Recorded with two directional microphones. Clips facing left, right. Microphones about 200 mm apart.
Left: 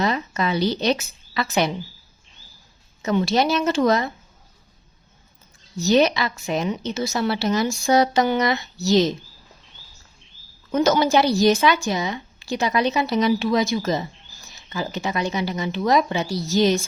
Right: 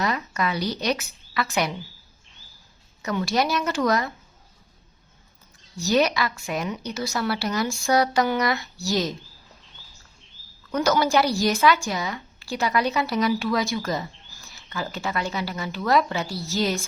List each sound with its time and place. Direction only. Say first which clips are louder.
0.0 s speech: left 3 dB; 25° left (ahead or behind)
3.0 s a woman's voice: left 4 dB; 25° left (ahead or behind)
5.8 s a woman's voice: left 4 dB; 25° left (ahead or behind)
10.7 s a woman's voice: left 3 dB; 20° left (ahead or behind)